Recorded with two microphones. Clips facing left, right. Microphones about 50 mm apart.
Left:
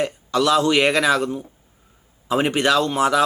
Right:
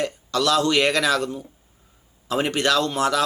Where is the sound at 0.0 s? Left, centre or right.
Centre.